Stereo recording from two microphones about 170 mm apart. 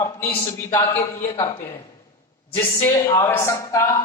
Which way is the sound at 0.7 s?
20° left (ahead or behind).